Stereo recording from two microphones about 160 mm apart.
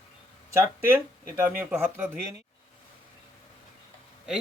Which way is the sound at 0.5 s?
15° right (ahead or behind).